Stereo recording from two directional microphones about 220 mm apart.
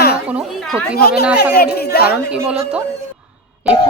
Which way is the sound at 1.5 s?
45° left (ahead or behind).